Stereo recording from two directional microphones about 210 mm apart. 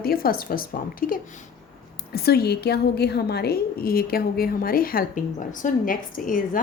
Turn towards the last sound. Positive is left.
turn(degrees=40)  # may be behind; listen again after turning